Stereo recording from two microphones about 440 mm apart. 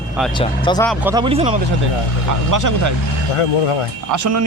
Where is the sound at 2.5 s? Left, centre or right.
Right.